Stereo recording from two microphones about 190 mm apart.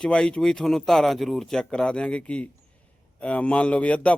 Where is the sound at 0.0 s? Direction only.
5° left (ahead or behind).